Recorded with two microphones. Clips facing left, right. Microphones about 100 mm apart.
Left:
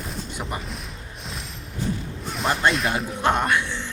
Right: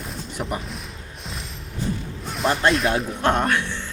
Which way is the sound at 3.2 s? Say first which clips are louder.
Left 2 dB; 10° left (ahead or behind).